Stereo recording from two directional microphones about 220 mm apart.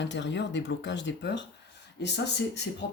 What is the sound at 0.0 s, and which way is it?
Speech, 55° left (ahead or behind).